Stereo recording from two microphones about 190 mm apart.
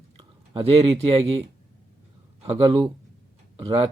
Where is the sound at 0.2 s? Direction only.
30° right (ahead or behind).